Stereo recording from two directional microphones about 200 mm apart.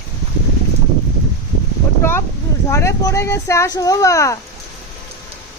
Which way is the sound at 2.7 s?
15° left (ahead or behind).